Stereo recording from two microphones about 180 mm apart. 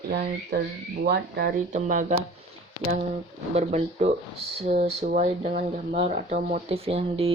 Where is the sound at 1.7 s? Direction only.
45° right (ahead or behind).